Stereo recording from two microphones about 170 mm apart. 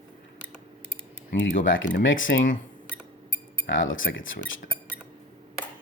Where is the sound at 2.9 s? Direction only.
5° left (ahead or behind).